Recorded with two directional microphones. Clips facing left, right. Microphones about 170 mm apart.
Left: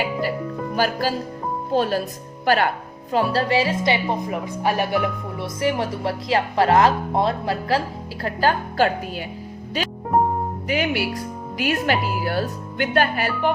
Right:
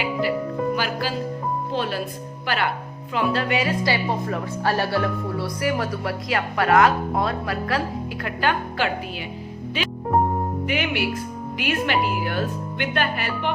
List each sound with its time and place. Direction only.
0.0 s music: 45° left (ahead or behind)
0.8 s a woman's voice: 40° left (ahead or behind)
10.7 s speech: 40° left (ahead or behind)